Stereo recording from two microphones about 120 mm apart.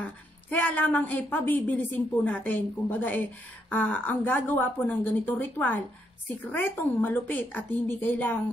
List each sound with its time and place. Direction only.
0.0 s speech: 10° left (ahead or behind)